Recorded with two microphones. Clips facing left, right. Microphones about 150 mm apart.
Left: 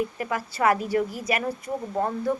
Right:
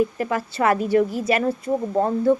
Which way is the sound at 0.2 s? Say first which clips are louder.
Right 3 dB; 30° right (ahead or behind).